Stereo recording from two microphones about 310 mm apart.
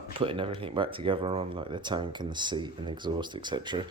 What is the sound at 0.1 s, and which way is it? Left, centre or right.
Speech, centre.